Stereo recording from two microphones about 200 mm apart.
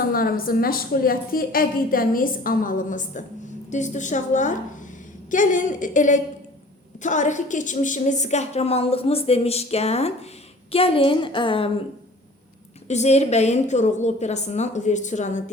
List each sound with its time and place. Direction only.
0.1 s a woman's voice: 45° left (ahead or behind); by 11.7 s 25° left (ahead or behind)
12.9 s a woman's voice: 35° left (ahead or behind)